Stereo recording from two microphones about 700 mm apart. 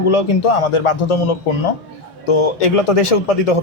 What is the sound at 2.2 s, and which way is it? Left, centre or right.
Speech, left.